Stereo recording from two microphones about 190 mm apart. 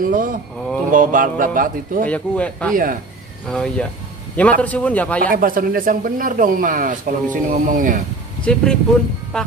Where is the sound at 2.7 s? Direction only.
45° right (ahead or behind).